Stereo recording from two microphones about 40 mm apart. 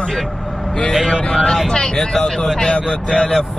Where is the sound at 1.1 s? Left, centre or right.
Centre.